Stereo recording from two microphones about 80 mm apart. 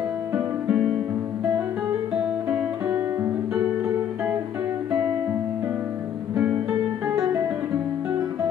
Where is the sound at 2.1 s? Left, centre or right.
Centre.